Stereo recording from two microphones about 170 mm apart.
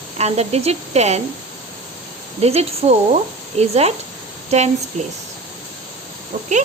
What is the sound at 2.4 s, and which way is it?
Speech, 40° right (ahead or behind).